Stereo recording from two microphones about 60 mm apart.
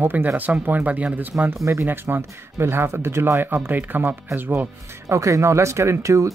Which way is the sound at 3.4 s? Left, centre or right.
Right.